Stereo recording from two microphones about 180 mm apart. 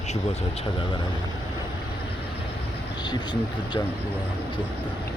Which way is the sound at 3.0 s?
25° left (ahead or behind).